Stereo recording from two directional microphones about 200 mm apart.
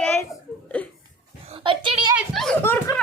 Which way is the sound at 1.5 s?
25° right (ahead or behind).